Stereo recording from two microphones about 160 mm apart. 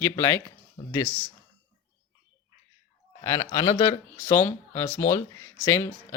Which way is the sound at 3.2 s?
20° left (ahead or behind).